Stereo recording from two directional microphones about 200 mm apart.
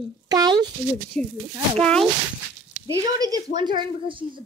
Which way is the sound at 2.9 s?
20° right (ahead or behind).